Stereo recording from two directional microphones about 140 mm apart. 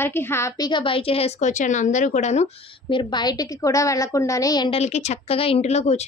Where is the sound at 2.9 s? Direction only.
35° left (ahead or behind).